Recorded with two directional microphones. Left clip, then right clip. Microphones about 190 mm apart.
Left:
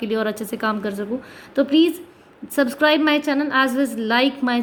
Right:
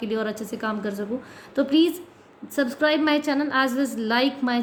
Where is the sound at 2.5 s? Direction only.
25° left (ahead or behind).